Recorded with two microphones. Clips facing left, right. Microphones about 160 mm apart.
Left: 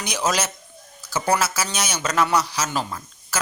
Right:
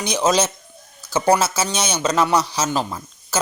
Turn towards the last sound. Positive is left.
turn(degrees=-25)  # may be behind; listen again after turning